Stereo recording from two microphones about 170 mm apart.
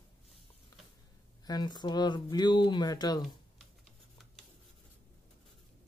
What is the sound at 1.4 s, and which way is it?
Speech, 25° left (ahead or behind).